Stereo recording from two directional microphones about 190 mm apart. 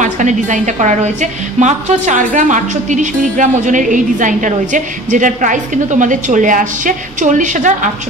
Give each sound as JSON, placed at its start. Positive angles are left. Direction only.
{"t": 0.0, "sound": "a woman's voice", "side_deg": -40}